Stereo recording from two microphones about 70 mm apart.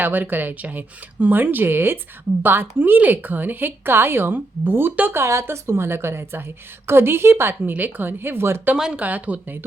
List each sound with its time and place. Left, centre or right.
0.0 s speech: right
5.2 s a woman's voice: right
7.6 s speech: right
8.7 s speech: centre
9.0 s speech: right